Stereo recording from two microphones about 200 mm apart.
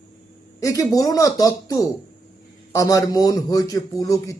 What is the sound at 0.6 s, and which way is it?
Speech, 15° left (ahead or behind).